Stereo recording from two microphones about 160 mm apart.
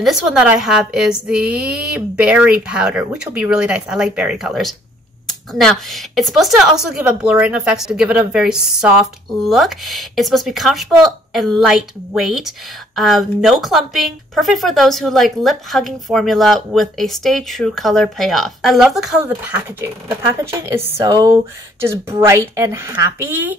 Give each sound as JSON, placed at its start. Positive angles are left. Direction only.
{"t": 0.0, "sound": "a woman's voice", "side_deg": -5}
{"t": 19.8, "sound": "a woman's voice", "side_deg": -15}
{"t": 21.0, "sound": "a sound", "side_deg": -20}
{"t": 22.6, "sound": "a woman's voice", "side_deg": -15}